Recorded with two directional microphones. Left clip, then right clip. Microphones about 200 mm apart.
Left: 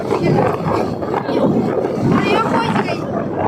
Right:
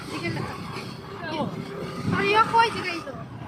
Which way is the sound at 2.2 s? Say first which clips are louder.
Right 1 dB; 20° left (ahead or behind).